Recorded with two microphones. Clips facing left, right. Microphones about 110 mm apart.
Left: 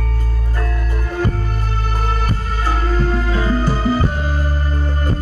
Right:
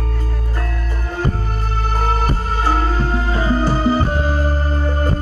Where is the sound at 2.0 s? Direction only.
45° right (ahead or behind).